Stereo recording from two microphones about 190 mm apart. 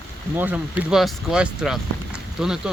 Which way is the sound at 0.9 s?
Centre (ahead or behind).